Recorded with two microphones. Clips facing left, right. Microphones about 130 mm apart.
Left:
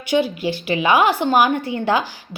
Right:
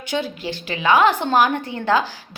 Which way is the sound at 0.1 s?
15° left (ahead or behind).